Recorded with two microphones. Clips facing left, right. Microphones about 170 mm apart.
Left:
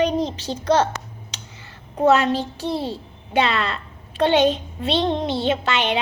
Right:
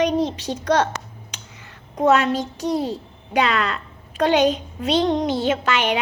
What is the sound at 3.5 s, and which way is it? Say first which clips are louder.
A child's voice: right 1 dB; 30° left (ahead or behind).